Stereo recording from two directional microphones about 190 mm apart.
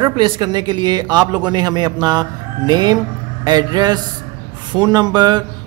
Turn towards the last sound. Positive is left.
turn(degrees=-20)  # may be behind; listen again after turning